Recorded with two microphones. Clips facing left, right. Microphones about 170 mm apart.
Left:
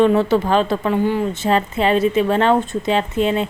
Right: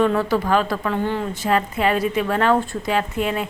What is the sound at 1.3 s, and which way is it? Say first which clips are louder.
Speech: left 3 dB; 25° left (ahead or behind).